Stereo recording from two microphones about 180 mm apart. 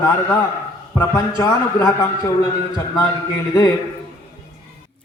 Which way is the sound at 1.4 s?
20° left (ahead or behind).